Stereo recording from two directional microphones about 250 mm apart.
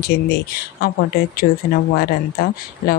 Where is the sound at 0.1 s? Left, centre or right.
Left.